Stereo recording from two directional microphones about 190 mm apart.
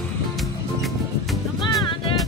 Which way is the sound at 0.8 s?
Centre (ahead or behind).